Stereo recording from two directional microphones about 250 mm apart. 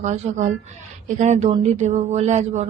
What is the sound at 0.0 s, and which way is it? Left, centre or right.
Speech, right.